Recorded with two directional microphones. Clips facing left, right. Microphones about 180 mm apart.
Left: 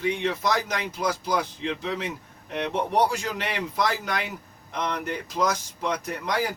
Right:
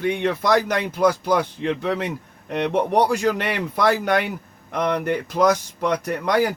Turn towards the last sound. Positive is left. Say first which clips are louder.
# right 7 dB
turn(degrees=-60)  # may be behind; listen again after turning